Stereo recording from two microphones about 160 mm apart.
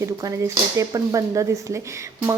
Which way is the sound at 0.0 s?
20° right (ahead or behind).